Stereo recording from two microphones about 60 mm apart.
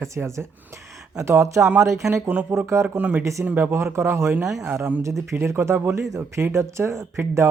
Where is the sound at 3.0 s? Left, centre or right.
Right.